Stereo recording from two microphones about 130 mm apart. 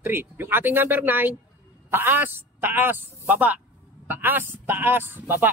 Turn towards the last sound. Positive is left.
turn(degrees=-15)  # may be behind; listen again after turning